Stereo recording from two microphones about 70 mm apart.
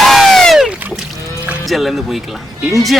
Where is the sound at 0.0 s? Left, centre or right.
Centre.